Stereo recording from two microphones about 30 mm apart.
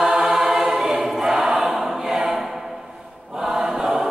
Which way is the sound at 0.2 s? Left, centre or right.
Centre.